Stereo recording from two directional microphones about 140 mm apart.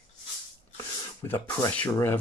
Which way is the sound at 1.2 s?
15° left (ahead or behind).